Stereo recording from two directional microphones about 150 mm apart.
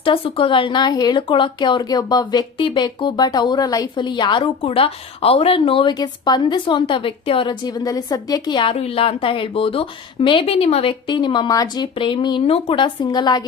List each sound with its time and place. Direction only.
0.0 s speech: 35° left (ahead or behind)
8.7 s speech: 40° left (ahead or behind)